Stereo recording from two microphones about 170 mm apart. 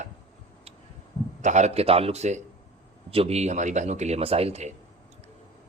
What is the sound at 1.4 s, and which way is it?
Speech, 45° right (ahead or behind).